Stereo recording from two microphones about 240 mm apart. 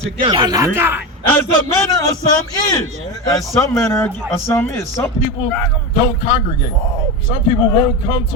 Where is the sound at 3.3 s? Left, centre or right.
Centre.